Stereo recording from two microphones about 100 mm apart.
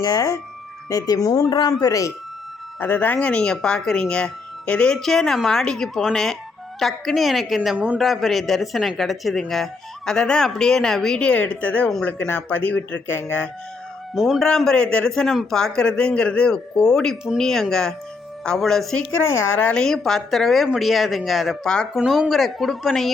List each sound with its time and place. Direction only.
0.0 s speech: 40° left (ahead or behind)
1.5 s speech: 55° left (ahead or behind)
1.8 s speech: 35° left (ahead or behind)
2.8 s speech: 15° left (ahead or behind)
14.1 s speech: 5° right (ahead or behind)
14.4 s speech: 5° left (ahead or behind)
19.2 s a woman's voice: 25° left (ahead or behind)
19.6 s speech: 5° left (ahead or behind)